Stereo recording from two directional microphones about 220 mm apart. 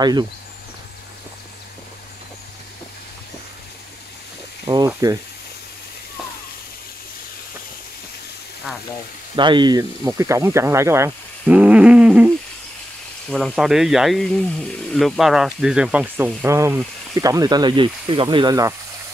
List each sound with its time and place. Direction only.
0.0 s speech: 20° right (ahead or behind)
4.6 s speech: 15° right (ahead or behind)
9.3 s speech: 20° right (ahead or behind); by 12.3 s 5° right (ahead or behind)
13.3 s speech: centre (ahead or behind); by 18.8 s 15° right (ahead or behind)